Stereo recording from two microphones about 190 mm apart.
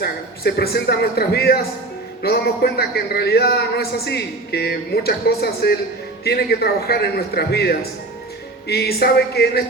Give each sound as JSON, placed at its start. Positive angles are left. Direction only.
{"t": 0.0, "sound": "speech", "side_deg": 55}